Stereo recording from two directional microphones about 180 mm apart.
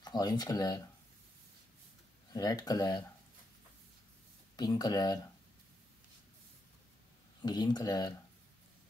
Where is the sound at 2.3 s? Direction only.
20° left (ahead or behind).